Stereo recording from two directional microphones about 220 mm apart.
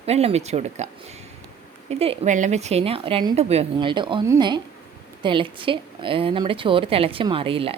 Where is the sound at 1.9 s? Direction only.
25° right (ahead or behind).